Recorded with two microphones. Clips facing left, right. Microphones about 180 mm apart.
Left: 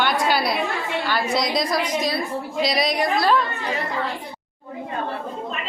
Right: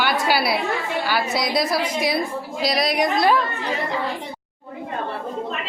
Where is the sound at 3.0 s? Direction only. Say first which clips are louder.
Right 2 dB; 15° right (ahead or behind).